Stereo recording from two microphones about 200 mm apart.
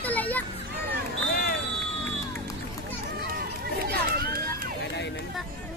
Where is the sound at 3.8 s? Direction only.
50° right (ahead or behind).